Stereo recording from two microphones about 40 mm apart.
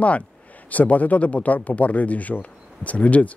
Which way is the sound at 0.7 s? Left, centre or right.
Left.